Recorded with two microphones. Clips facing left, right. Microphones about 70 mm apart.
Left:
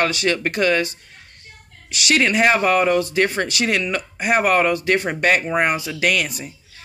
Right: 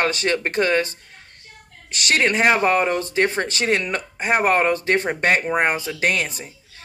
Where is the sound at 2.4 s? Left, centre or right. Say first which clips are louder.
Left 1 dB; right.